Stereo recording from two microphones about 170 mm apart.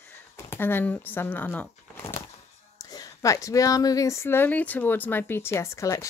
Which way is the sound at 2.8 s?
20° left (ahead or behind).